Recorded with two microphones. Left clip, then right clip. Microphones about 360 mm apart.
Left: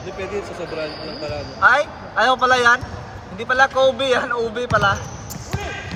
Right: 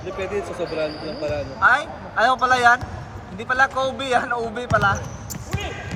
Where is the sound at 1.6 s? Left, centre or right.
Centre.